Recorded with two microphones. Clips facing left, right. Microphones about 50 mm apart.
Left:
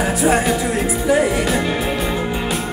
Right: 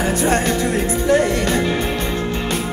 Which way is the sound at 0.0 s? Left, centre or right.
Centre.